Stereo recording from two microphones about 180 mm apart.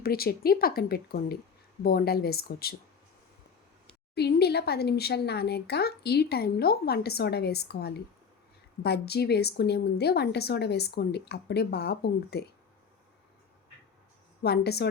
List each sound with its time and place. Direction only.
0.0 s speech: 55° left (ahead or behind)
4.1 s speech: 65° left (ahead or behind)
14.4 s speech: 65° left (ahead or behind)